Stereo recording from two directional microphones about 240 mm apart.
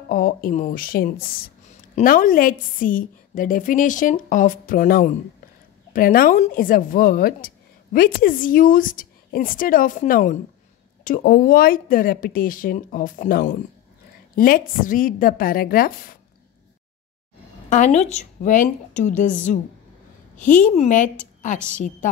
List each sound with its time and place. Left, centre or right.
0.1 s speech: left
17.6 s speech: left